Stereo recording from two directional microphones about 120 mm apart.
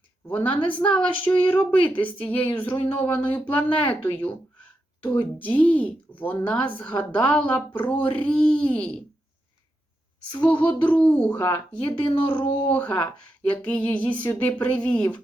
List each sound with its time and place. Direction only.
0.3 s a woman's voice: 15° left (ahead or behind)
5.4 s a woman's voice: 15° left (ahead or behind)
10.3 s a woman's voice: 10° left (ahead or behind)
12.0 s speech: 50° left (ahead or behind)
12.6 s a woman's voice: 15° left (ahead or behind)